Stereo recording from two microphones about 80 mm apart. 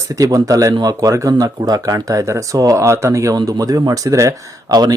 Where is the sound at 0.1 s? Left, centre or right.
Right.